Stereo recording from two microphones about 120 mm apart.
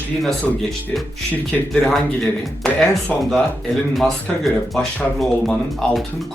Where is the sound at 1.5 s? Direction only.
5° left (ahead or behind).